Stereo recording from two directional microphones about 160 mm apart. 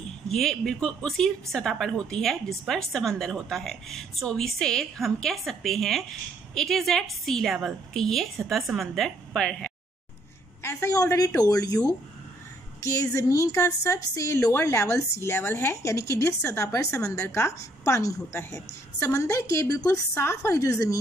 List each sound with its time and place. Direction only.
0.3 s a woman's voice: 5° left (ahead or behind)
10.6 s a woman's voice: 15° left (ahead or behind)